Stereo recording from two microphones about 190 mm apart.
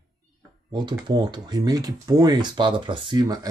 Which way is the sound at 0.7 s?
25° right (ahead or behind).